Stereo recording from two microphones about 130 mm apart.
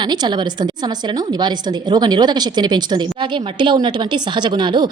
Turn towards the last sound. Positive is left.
turn(degrees=-35)  # may be behind; listen again after turning